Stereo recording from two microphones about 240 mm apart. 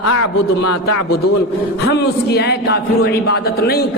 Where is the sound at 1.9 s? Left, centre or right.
Left.